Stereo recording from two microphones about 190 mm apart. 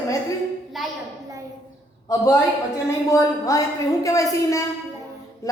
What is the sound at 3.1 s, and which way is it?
A woman's voice, 15° left (ahead or behind).